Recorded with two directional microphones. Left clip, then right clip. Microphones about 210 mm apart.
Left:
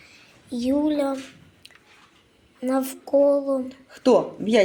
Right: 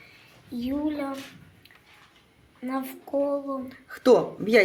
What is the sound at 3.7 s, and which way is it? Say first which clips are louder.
Speech: right 1 dB; 5° left (ahead or behind).